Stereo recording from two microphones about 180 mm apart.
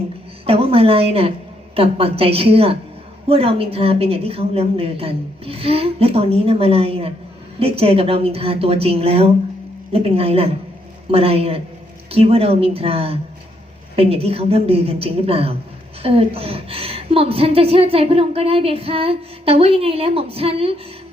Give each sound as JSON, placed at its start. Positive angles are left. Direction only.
{"t": 0.4, "sound": "a woman's voice", "side_deg": -30}